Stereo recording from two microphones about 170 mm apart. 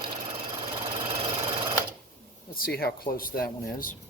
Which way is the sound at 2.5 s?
60° left (ahead or behind).